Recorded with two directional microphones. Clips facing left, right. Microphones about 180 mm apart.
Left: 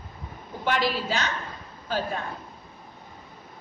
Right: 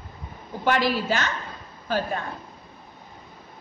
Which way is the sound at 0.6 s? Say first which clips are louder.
Right 3 dB; 50° right (ahead or behind).